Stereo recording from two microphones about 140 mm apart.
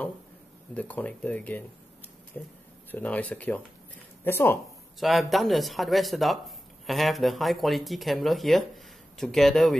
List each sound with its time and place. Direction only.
0.7 s speech: 10° left (ahead or behind)
5.0 s speech: centre (ahead or behind)